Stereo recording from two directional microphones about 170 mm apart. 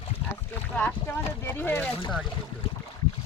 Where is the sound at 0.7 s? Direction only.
10° left (ahead or behind).